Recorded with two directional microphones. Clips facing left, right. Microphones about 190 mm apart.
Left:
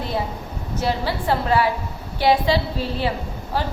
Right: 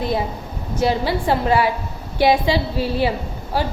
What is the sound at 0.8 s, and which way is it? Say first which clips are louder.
A woman's voice: right 4 dB; 15° right (ahead or behind).